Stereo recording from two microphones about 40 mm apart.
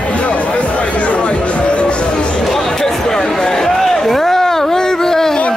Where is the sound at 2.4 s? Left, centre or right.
Centre.